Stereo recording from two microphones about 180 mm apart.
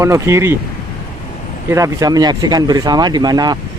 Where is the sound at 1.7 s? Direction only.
20° right (ahead or behind).